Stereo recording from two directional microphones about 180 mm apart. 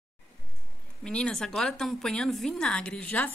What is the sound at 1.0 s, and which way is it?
A woman's voice, 5° left (ahead or behind).